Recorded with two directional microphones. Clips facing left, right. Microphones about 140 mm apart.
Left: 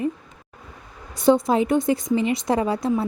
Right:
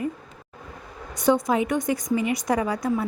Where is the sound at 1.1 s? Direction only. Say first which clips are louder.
Left 3 dB; 30° left (ahead or behind).